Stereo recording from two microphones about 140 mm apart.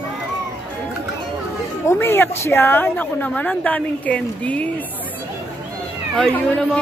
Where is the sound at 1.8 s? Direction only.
15° left (ahead or behind).